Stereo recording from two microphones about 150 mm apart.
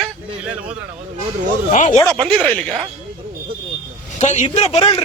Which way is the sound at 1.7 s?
55° left (ahead or behind).